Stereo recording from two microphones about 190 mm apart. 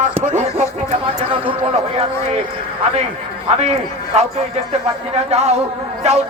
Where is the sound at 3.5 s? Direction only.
35° right (ahead or behind).